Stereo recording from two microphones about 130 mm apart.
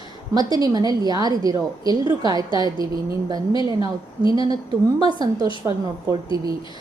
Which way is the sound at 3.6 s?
30° right (ahead or behind).